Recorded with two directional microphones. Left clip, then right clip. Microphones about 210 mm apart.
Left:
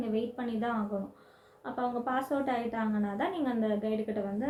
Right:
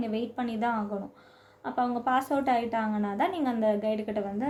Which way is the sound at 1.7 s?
45° right (ahead or behind).